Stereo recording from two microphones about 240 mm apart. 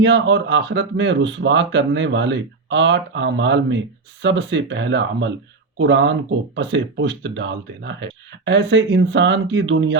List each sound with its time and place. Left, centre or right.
0.0 s speech: right